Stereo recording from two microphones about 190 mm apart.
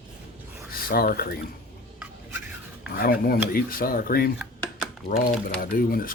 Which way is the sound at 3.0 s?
50° left (ahead or behind).